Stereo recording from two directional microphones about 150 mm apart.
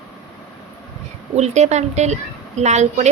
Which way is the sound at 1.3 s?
50° right (ahead or behind).